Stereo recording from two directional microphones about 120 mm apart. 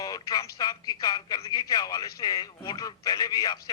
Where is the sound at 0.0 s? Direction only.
30° left (ahead or behind).